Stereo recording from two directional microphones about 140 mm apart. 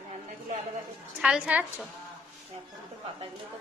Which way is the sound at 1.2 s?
5° right (ahead or behind).